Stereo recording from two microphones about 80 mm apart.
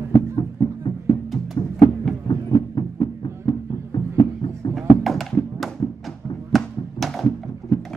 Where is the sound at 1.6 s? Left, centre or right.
Left.